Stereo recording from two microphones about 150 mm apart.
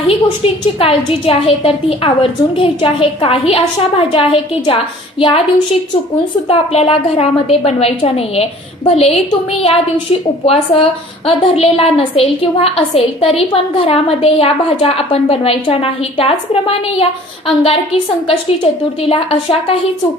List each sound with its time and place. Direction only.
0.4 s a woman's voice: 40° left (ahead or behind)
6.5 s a woman's voice: 40° left (ahead or behind)